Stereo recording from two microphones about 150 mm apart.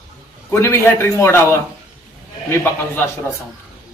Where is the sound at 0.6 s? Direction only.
15° left (ahead or behind).